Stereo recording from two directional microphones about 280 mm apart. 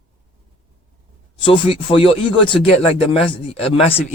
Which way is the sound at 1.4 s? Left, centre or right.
Centre.